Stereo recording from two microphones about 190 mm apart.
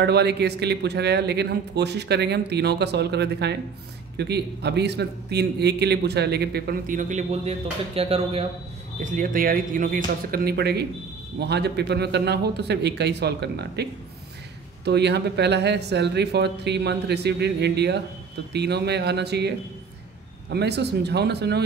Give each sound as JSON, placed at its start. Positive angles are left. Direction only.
{"t": 0.0, "sound": "a man's voice", "side_deg": -60}
{"t": 9.0, "sound": "a man's voice", "side_deg": -45}
{"t": 14.9, "sound": "a man's voice", "side_deg": -60}